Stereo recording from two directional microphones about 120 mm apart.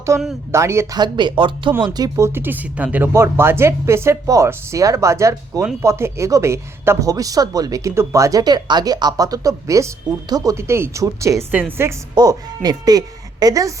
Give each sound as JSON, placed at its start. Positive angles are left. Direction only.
{"t": 0.1, "sound": "speech", "side_deg": -25}
{"t": 0.9, "sound": "speech", "side_deg": -40}
{"t": 12.1, "sound": "speech", "side_deg": -35}